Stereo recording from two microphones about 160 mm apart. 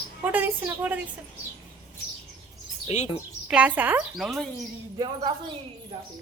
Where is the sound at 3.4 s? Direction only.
10° right (ahead or behind).